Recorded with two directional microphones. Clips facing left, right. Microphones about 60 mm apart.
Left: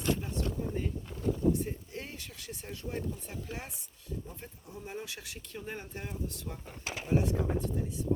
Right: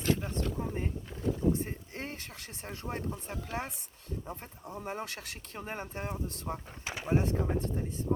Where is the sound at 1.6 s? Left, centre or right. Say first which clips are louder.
Even; right.